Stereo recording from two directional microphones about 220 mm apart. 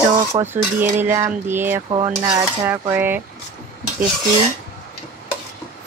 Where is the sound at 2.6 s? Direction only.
10° right (ahead or behind).